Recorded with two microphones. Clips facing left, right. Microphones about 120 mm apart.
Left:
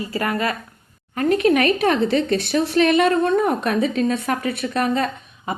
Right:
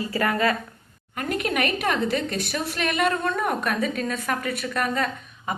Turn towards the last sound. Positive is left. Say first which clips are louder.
# left 3 dB
turn(degrees=35)  # may be behind; listen again after turning